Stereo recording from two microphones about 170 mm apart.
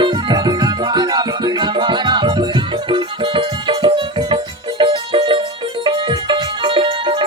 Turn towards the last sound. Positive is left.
turn(degrees=-30)  # may be behind; listen again after turning